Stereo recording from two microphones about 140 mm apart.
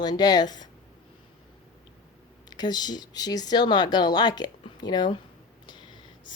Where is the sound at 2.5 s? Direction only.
30° left (ahead or behind).